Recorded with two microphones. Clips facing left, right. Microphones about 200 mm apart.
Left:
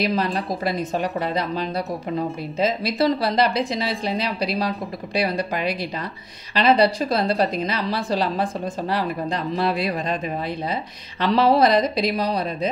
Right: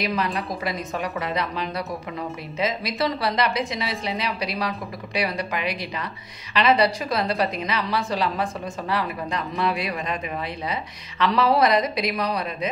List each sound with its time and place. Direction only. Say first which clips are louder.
0.0 s a woman's voice: left 3 dB; 35° left (ahead or behind)